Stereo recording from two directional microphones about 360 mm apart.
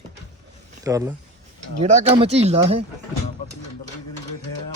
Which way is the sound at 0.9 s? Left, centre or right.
Centre.